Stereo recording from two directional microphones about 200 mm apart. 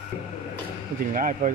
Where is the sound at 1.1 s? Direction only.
40° right (ahead or behind).